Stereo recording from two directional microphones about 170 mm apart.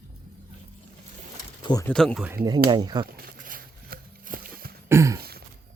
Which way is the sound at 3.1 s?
55° right (ahead or behind).